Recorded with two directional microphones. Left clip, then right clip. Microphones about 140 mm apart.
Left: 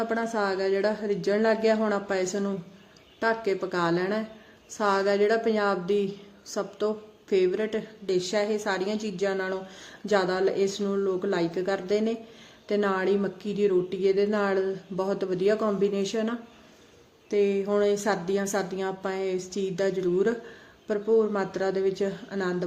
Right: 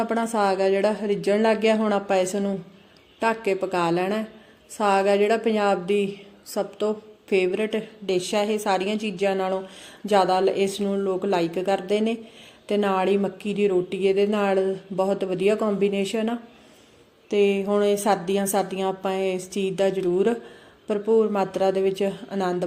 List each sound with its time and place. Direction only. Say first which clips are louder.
0.0 s a woman's voice: right 4 dB; 20° right (ahead or behind)